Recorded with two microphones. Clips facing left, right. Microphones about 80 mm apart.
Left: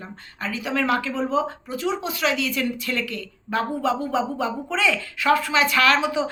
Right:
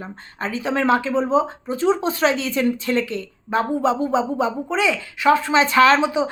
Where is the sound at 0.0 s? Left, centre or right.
Right.